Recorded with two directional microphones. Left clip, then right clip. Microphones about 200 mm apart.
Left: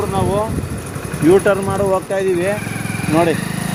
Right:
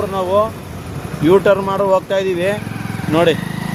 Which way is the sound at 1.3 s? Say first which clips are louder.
Right 1 dB; 25° right (ahead or behind).